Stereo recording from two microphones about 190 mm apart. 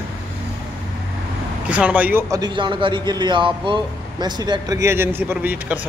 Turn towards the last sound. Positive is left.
turn(degrees=-10)  # may be behind; listen again after turning